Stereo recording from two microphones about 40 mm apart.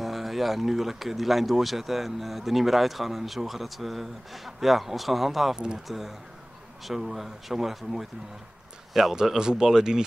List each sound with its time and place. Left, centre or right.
0.0 s speech: centre
9.1 s speech: centre